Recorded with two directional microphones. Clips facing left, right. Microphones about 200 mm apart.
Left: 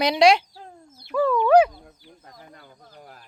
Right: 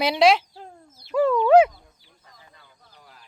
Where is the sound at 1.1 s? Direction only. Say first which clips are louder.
Right 1 dB; 20° right (ahead or behind).